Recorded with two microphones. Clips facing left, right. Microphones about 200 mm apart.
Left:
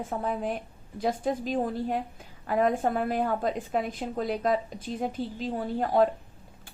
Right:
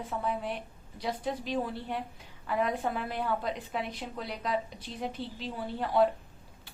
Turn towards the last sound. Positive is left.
turn(degrees=45)  # may be behind; listen again after turning